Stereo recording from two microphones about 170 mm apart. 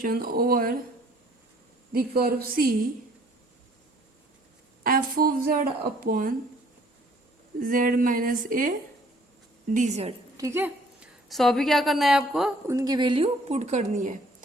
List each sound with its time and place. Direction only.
0.0 s speech: 60° right (ahead or behind)
1.9 s speech: 65° right (ahead or behind)
4.8 s speech: 55° right (ahead or behind)
7.6 s speech: 55° right (ahead or behind)
9.7 s a woman's voice: 45° right (ahead or behind)
10.3 s a sound: 15° right (ahead or behind)
11.3 s a woman's voice: centre (ahead or behind)
12.6 s a woman's voice: 20° right (ahead or behind); by 14.2 s 45° right (ahead or behind)